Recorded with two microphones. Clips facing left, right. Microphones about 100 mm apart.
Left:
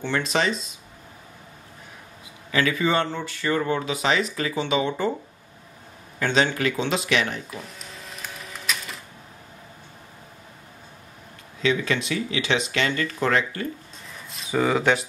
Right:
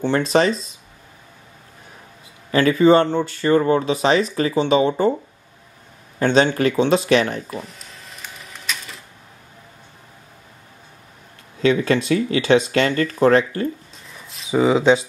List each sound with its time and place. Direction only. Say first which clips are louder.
0.0 s speech: right 7 dB; 40° right (ahead or behind)
2.5 s speech: right 9 dB; 35° right (ahead or behind)
6.1 s speech: right 6 dB; 35° right (ahead or behind)
7.6 s printer: even; centre (ahead or behind)
11.6 s speech: right 6 dB; 40° right (ahead or behind)
14.5 s speech: right 6 dB; 15° right (ahead or behind)